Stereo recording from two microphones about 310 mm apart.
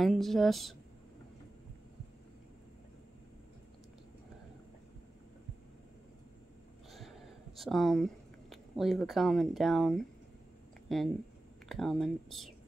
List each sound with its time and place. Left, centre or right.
0.0 s speech: centre
6.9 s a sound: centre
10.9 s speech: centre